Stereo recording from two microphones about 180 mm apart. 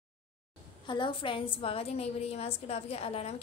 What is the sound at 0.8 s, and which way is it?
A woman's voice, 25° left (ahead or behind).